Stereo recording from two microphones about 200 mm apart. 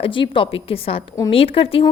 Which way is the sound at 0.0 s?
25° left (ahead or behind).